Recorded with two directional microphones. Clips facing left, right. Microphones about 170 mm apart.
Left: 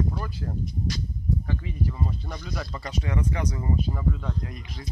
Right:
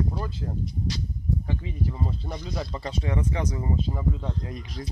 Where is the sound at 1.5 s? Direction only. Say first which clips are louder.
Even; 20° right (ahead or behind).